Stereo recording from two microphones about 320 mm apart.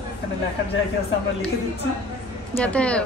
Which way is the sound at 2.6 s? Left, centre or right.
Centre.